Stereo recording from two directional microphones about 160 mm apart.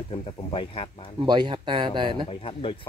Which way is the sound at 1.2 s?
30° right (ahead or behind).